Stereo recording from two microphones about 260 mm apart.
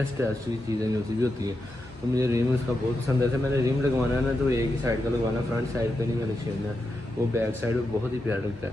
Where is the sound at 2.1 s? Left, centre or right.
Centre.